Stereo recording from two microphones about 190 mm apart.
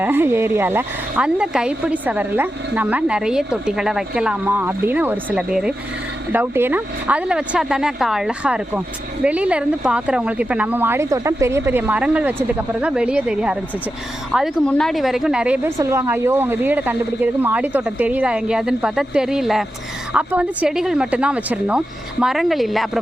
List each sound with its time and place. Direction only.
0.0 s speech: 10° right (ahead or behind)